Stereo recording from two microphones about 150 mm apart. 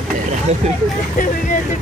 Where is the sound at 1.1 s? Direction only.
65° left (ahead or behind).